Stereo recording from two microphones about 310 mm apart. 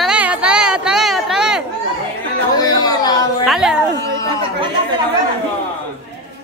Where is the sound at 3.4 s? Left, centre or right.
Centre.